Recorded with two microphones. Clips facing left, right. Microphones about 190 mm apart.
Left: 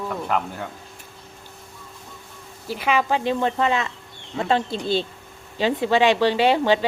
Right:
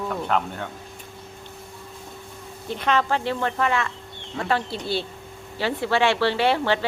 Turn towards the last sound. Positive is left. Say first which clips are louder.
# left 3 dB
turn(degrees=15)  # may be behind; listen again after turning